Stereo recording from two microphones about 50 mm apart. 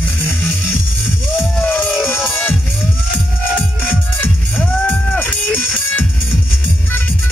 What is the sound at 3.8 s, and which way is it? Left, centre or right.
Music, left.